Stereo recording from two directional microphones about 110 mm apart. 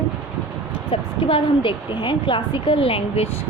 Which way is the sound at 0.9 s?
50° left (ahead or behind).